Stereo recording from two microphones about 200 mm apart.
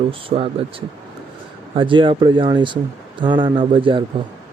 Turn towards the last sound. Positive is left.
turn(degrees=-25)  # may be behind; listen again after turning